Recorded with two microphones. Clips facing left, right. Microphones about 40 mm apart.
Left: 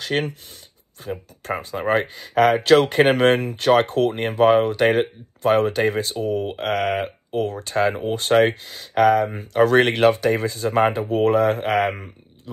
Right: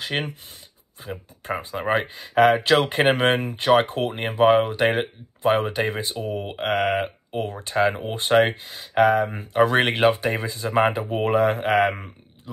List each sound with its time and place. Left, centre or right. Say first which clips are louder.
0.1 s speech: left 4 dB; centre
1.4 s speech: left 1 dB; right